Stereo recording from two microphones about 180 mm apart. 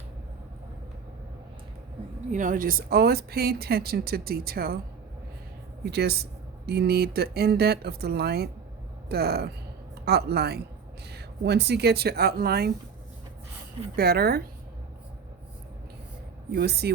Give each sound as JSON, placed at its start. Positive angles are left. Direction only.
{"t": 2.3, "sound": "speech", "side_deg": -45}
{"t": 5.8, "sound": "speech", "side_deg": -65}
{"t": 13.9, "sound": "speech", "side_deg": -60}
{"t": 16.5, "sound": "speech", "side_deg": -65}